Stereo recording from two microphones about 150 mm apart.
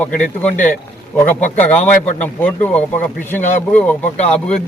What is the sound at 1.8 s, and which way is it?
Speech, 55° left (ahead or behind).